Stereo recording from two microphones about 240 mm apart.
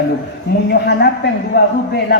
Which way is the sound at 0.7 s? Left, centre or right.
Left.